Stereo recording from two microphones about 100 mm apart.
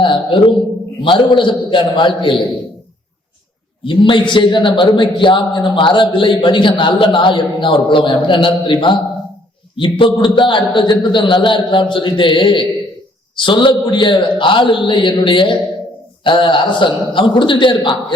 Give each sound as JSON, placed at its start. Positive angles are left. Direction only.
{"t": 0.0, "sound": "mantra", "side_deg": 55}
{"t": 1.0, "sound": "a man's voice", "side_deg": 55}
{"t": 3.8, "sound": "a man's voice", "side_deg": 55}